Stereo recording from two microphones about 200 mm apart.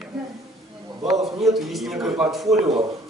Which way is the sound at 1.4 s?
Centre (ahead or behind).